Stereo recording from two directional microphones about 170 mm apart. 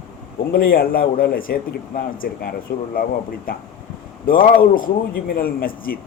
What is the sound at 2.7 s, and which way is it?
Speech, 60° left (ahead or behind).